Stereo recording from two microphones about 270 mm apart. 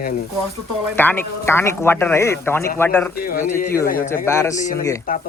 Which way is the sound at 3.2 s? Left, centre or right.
Left.